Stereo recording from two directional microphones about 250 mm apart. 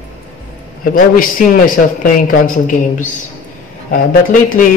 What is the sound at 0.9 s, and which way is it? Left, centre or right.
Speech, left.